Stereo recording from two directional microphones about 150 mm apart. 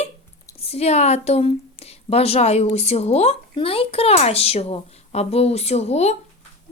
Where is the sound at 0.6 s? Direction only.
45° left (ahead or behind).